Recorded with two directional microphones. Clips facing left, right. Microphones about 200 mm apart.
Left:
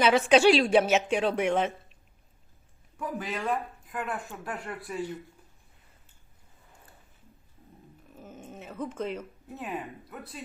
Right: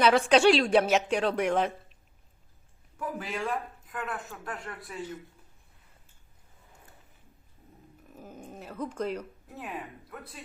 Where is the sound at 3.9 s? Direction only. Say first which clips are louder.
Left 4 dB; 5° left (ahead or behind).